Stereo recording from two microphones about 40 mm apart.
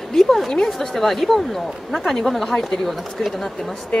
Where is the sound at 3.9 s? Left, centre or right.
Centre.